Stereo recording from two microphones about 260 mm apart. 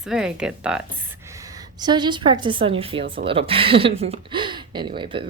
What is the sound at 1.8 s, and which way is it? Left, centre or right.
Speech, centre.